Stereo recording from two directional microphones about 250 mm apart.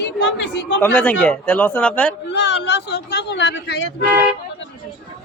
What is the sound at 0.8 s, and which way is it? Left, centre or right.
A man's voice, centre.